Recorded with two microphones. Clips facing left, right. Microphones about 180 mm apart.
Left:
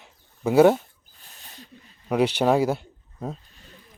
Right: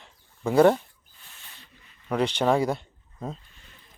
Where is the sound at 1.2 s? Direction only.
40° left (ahead or behind).